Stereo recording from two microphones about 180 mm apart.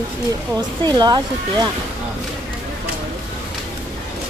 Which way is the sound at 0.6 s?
25° right (ahead or behind).